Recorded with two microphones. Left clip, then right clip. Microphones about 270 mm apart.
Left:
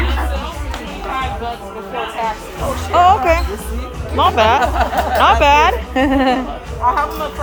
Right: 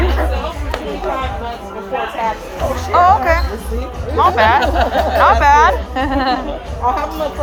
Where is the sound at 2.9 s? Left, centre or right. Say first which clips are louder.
Even; left.